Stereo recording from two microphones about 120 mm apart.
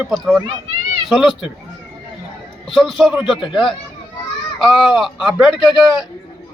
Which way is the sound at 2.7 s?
Centre (ahead or behind).